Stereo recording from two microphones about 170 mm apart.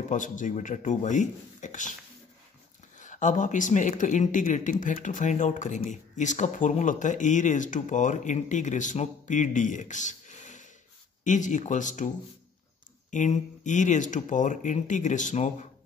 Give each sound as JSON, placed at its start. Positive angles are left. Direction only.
{"t": 0.1, "sound": "speech", "side_deg": 50}
{"t": 3.0, "sound": "speech", "side_deg": 50}
{"t": 13.1, "sound": "speech", "side_deg": 45}